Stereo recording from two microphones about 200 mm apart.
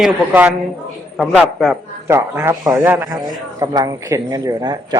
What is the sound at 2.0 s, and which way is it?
Speech, 15° right (ahead or behind).